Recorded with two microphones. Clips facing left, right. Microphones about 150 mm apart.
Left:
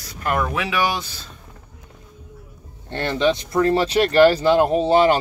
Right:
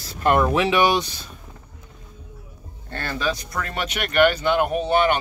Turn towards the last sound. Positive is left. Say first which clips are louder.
# left 4 dB
turn(degrees=30)  # may be behind; listen again after turning